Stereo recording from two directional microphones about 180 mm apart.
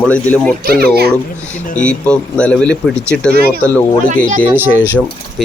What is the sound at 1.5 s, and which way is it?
Speech, 45° left (ahead or behind).